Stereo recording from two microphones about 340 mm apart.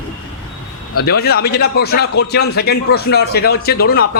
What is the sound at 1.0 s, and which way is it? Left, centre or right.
A man's voice, left.